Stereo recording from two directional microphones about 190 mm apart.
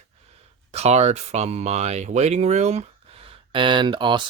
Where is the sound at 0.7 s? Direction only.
35° right (ahead or behind).